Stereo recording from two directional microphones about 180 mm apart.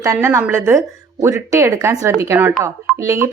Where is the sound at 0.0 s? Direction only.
15° right (ahead or behind).